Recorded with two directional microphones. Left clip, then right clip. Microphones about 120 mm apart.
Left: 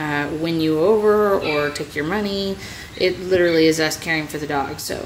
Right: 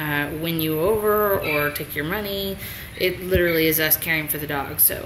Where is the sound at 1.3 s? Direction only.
35° left (ahead or behind).